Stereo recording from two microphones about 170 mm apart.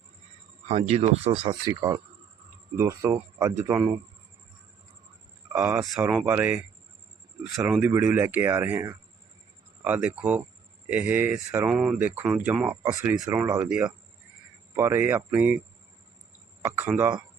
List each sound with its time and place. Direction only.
0.7 s speech: 40° right (ahead or behind); by 3.5 s 15° right (ahead or behind)
5.5 s speech: 10° right (ahead or behind)
7.7 s speech: 10° right (ahead or behind)
13.7 s speech: 5° right (ahead or behind)
16.6 s speech: 10° right (ahead or behind)